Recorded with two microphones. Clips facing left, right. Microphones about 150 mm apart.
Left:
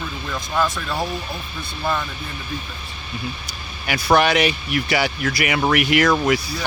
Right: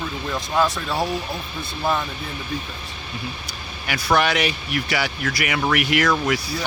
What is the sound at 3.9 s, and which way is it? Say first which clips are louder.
Speech: left 3 dB; 20° left (ahead or behind).